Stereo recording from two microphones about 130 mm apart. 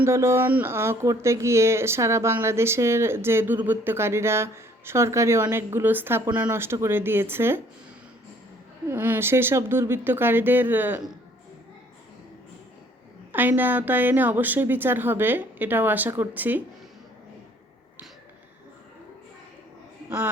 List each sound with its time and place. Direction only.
0.0 s a woman's voice: 20° right (ahead or behind)
8.9 s a woman's voice: 15° right (ahead or behind)
13.3 s a woman's voice: 15° right (ahead or behind)
20.1 s a man's voice: 15° right (ahead or behind)